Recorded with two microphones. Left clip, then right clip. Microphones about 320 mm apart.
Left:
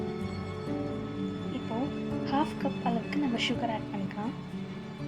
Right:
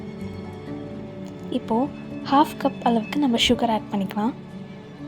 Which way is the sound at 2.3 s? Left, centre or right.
Right.